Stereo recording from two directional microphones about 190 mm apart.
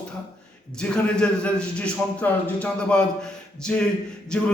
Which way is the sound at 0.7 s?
5° left (ahead or behind).